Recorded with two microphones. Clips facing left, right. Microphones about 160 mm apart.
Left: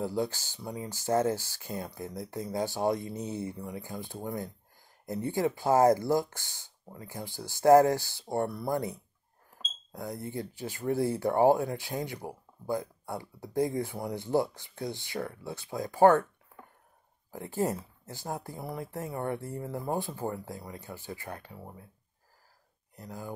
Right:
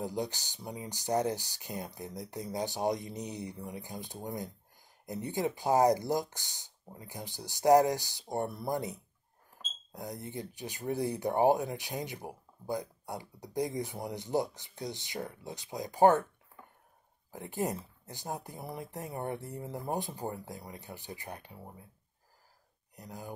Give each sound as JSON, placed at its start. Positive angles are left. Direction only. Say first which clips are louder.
{"t": 0.0, "sound": "speech", "louder": "left 4 dB", "side_deg": -20}
{"t": 9.9, "sound": "speech", "louder": "left 4 dB", "side_deg": -20}
{"t": 17.4, "sound": "speech", "louder": "left 4 dB", "side_deg": -20}
{"t": 22.9, "sound": "speech", "louder": "left 3 dB", "side_deg": -20}